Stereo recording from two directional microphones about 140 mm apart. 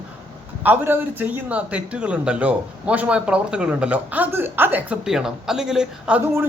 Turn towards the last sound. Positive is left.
turn(degrees=-5)  # may be behind; listen again after turning